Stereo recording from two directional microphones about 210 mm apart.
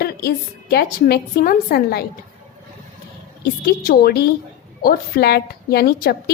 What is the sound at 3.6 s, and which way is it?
A woman's voice, 45° left (ahead or behind).